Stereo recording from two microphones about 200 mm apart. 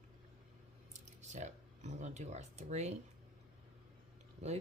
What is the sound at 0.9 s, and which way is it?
Speech, 35° right (ahead or behind).